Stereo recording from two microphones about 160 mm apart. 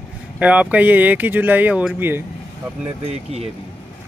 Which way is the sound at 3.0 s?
40° right (ahead or behind).